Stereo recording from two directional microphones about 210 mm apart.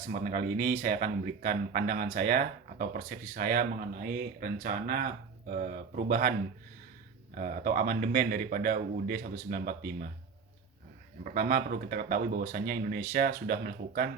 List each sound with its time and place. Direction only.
0.1 s speech: 40° right (ahead or behind)
7.3 s speech: 40° right (ahead or behind)
11.2 s speech: 40° right (ahead or behind)